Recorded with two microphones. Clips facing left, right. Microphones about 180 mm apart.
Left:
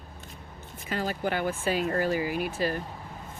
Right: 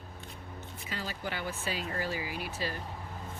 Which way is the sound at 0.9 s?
50° left (ahead or behind).